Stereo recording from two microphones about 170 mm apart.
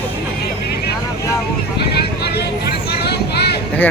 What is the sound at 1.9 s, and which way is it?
Vehicle, 70° left (ahead or behind).